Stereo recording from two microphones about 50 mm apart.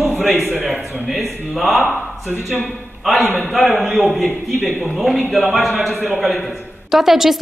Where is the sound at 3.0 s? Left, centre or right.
Centre.